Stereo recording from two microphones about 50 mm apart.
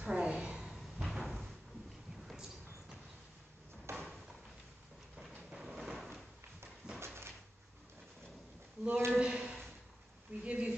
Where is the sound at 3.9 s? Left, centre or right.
Right.